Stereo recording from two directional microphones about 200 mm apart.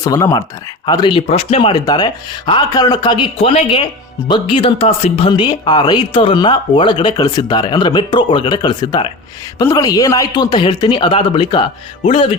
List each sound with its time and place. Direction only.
0.0 s speech: 15° left (ahead or behind); by 5.3 s 30° left (ahead or behind)
5.3 s speech: 20° left (ahead or behind)